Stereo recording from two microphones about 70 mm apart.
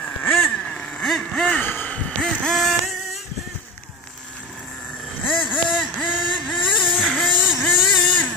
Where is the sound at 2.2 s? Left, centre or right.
Centre.